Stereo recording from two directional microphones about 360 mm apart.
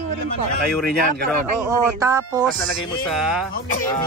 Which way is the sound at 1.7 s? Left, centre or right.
Centre.